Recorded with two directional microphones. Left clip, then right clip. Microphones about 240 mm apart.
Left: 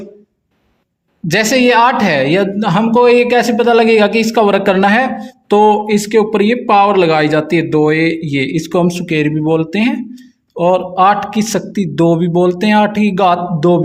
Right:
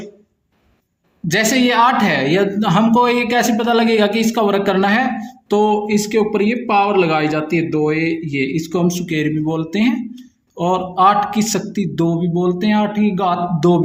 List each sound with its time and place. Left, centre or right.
1.3 s speech: left
13.6 s speech: centre